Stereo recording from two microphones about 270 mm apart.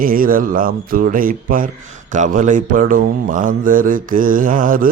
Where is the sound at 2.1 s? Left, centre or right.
Right.